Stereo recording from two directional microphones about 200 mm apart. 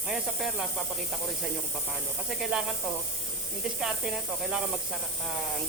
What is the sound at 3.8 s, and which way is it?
Speech, centre (ahead or behind).